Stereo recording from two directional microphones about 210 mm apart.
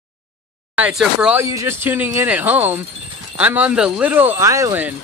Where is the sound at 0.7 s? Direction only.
5° right (ahead or behind).